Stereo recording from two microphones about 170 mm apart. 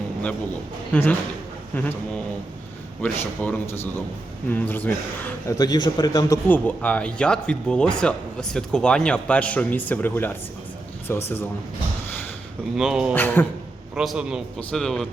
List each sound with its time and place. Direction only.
0.9 s speech: 5° left (ahead or behind)
3.0 s speech: 10° left (ahead or behind)
6.5 s speech: 10° left (ahead or behind)
12.7 s a man's voice: 5° right (ahead or behind)
13.1 s speech: 10° left (ahead or behind)
13.9 s a man's voice: 5° right (ahead or behind)